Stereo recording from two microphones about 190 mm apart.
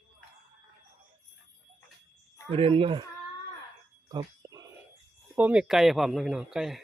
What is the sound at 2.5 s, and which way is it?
Speech, 30° right (ahead or behind).